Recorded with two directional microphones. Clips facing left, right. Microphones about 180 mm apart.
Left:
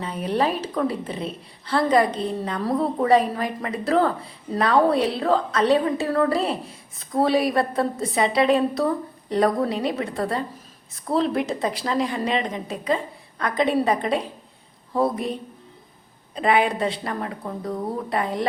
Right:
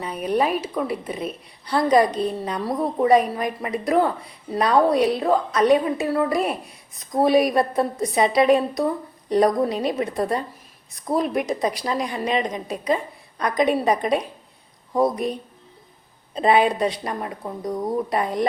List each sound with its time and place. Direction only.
0.0 s a woman's voice: 15° right (ahead or behind)